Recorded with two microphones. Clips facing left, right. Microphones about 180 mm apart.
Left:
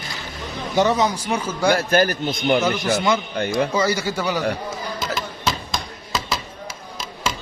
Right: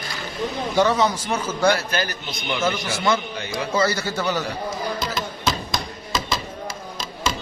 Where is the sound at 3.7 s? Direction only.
15° left (ahead or behind).